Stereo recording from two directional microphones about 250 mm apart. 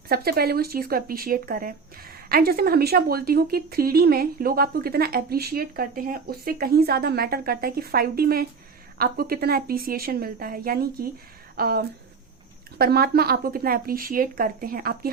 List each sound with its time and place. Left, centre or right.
0.1 s speech: right